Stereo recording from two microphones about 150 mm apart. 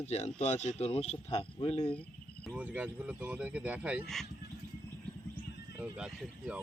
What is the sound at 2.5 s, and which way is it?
Speech, 10° right (ahead or behind).